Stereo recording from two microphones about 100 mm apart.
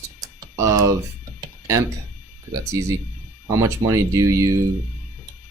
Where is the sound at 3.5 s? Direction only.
30° right (ahead or behind).